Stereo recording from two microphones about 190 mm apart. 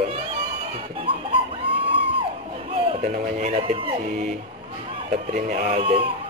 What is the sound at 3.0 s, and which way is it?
Speech, 40° right (ahead or behind).